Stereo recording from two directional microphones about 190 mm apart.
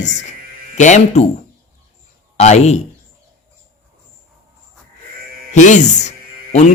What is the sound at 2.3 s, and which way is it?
Speech, 35° left (ahead or behind).